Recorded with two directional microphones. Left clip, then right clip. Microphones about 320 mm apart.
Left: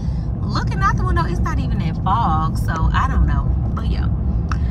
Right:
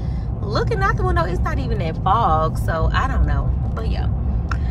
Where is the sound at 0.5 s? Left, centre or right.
Centre.